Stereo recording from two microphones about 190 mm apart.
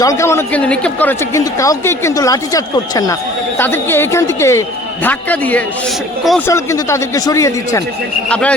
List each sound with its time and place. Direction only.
0.0 s a man's voice: 15° left (ahead or behind)